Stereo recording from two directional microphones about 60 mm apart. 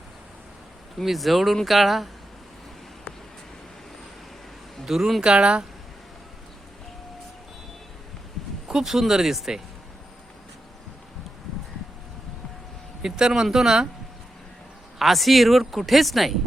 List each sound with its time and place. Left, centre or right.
0.9 s speech: centre
4.9 s speech: centre
5.2 s speech: centre
8.6 s speech: centre
13.0 s speech: centre
14.9 s speech: centre